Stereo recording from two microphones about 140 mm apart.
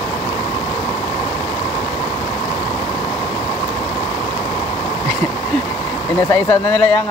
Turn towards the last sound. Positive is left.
turn(degrees=25)  # may be behind; listen again after turning